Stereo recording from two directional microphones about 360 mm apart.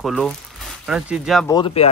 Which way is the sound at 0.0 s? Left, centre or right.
Centre.